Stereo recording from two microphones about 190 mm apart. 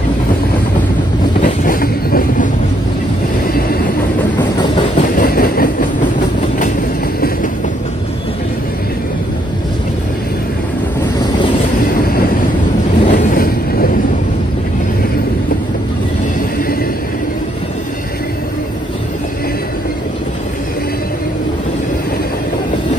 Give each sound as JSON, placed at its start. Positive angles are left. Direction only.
{"t": 1.4, "sound": "train", "side_deg": 45}
{"t": 5.0, "sound": "train", "side_deg": 45}
{"t": 13.0, "sound": "vehicle", "side_deg": 45}